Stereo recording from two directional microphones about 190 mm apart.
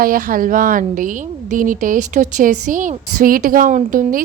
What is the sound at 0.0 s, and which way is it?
A woman's voice, 50° right (ahead or behind).